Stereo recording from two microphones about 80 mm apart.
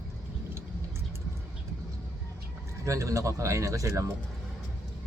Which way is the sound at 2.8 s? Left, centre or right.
Right.